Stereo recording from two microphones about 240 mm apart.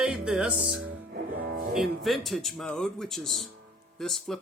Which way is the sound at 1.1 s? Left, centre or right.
Right.